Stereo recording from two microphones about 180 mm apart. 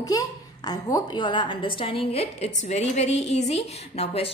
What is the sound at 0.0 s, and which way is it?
A child's voice, 20° left (ahead or behind).